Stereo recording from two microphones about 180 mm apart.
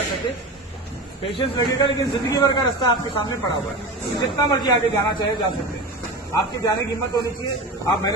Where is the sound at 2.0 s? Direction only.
20° left (ahead or behind).